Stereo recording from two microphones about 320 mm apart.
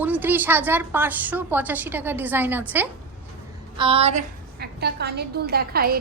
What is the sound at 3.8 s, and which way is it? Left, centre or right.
A woman's voice, centre.